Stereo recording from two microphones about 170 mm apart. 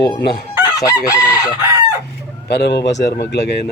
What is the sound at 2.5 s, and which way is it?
Speech, 75° left (ahead or behind).